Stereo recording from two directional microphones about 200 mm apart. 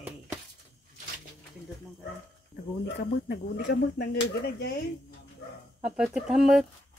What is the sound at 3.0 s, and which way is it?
Speech, 55° left (ahead or behind).